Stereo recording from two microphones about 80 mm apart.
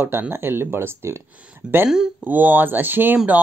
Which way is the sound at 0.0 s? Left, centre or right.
Right.